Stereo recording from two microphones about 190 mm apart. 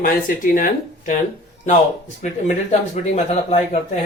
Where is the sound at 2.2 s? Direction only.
40° left (ahead or behind).